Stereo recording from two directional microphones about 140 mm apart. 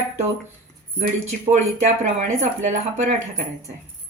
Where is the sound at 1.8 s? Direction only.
60° right (ahead or behind).